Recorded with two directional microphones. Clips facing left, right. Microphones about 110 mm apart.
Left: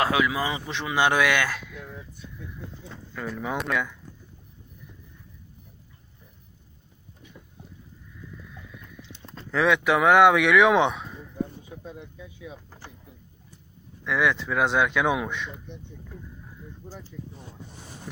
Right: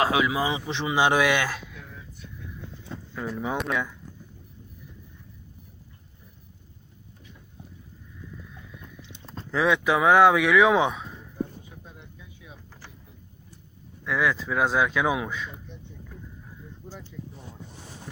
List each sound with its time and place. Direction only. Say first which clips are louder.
0.0 s speech: right 1 dB; 20° right (ahead or behind)
3.2 s speech: right 1 dB; 15° right (ahead or behind)
9.5 s speech: left 1 dB; 15° right (ahead or behind)
14.0 s speech: left 1 dB; centre (ahead or behind)
17.1 s speech: even; 40° left (ahead or behind)